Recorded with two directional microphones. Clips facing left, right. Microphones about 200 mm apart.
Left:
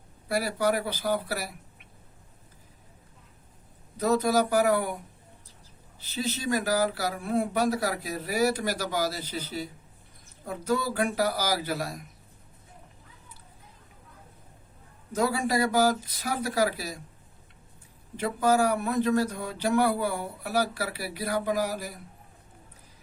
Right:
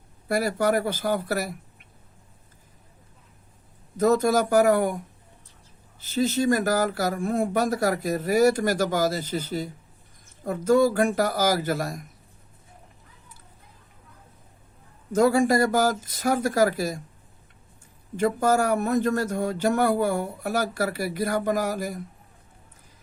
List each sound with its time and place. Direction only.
0.3 s speech: 50° right (ahead or behind)
3.9 s speech: 50° right (ahead or behind)
6.0 s speech: 45° right (ahead or behind)
15.1 s speech: 45° right (ahead or behind)
18.2 s speech: 45° right (ahead or behind)